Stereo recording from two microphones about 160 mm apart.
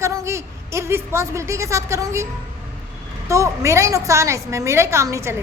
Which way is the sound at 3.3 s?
20° right (ahead or behind).